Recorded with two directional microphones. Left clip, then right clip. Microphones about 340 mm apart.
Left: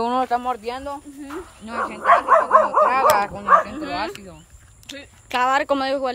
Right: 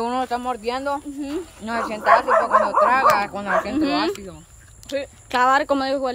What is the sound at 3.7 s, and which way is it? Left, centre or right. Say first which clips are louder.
Speech: right 7 dB; right.